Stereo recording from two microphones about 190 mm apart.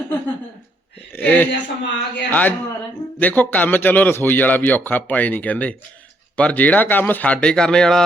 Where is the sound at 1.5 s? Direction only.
70° left (ahead or behind).